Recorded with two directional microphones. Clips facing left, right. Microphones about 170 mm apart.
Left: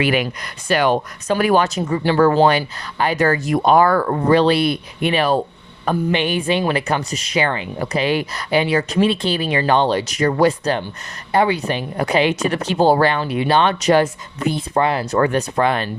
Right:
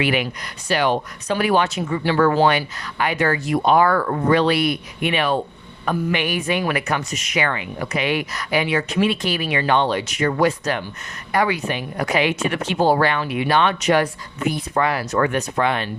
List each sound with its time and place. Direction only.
0.0 s speech: 45° left (ahead or behind)